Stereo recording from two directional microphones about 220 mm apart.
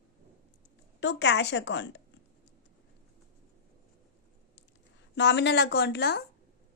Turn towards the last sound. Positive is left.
turn(degrees=45)  # may be behind; listen again after turning